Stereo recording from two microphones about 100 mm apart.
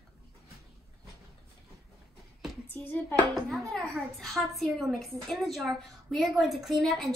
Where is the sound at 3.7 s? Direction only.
5° left (ahead or behind).